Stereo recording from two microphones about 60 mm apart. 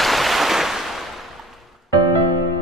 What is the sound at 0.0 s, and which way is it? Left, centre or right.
Waves, centre.